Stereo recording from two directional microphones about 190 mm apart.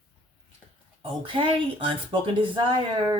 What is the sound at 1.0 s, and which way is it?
Speech, 25° right (ahead or behind).